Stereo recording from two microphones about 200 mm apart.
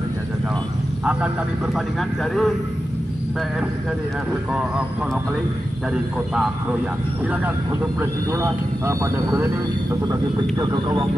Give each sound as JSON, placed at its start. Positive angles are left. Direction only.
{"t": 2.0, "sound": "speech", "side_deg": 0}
{"t": 8.0, "sound": "speech", "side_deg": -15}
{"t": 10.6, "sound": "speech", "side_deg": -20}